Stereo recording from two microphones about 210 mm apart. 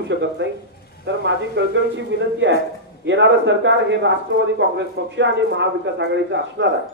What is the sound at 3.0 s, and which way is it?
Speech, 60° right (ahead or behind).